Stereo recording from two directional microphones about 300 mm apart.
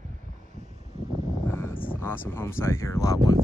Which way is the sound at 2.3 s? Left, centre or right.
Centre.